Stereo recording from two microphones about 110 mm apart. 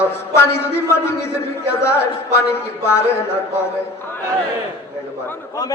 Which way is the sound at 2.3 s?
25° left (ahead or behind).